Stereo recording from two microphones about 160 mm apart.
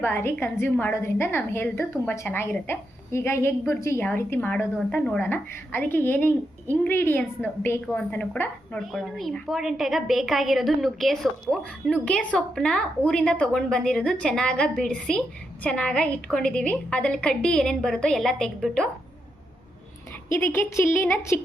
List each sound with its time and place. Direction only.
0.0 s a woman's voice: 15° left (ahead or behind)
20.3 s a woman's voice: 15° left (ahead or behind)